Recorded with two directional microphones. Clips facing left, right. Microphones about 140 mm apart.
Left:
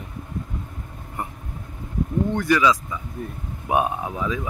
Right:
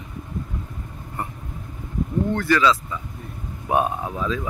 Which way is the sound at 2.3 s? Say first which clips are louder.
Even; 15° left (ahead or behind).